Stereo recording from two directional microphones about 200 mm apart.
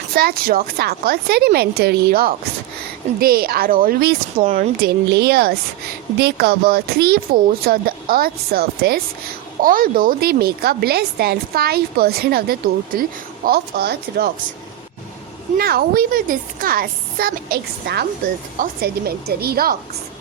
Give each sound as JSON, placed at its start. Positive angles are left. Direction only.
{"t": 0.2, "sound": "a woman's voice", "side_deg": -50}
{"t": 4.8, "sound": "a woman's voice", "side_deg": -55}
{"t": 15.5, "sound": "a woman's voice", "side_deg": -50}